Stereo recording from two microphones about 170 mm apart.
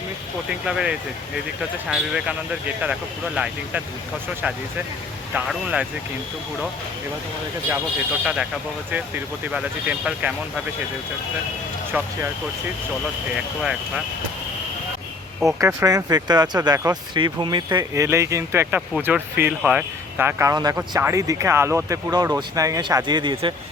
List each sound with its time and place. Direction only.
0.6 s speech: 5° right (ahead or behind)
3.3 s speech: 5° right (ahead or behind)
5.3 s speech: 5° right (ahead or behind)
8.2 s speech: 5° right (ahead or behind)
11.9 s speech: 10° right (ahead or behind)
13.3 s speech: 5° right (ahead or behind)
15.4 s speech: 15° right (ahead or behind)